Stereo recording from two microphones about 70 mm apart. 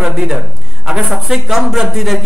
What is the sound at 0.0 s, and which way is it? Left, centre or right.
Speech, centre.